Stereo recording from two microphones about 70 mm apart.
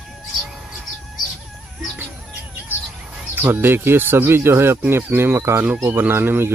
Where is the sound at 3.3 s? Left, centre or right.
Right.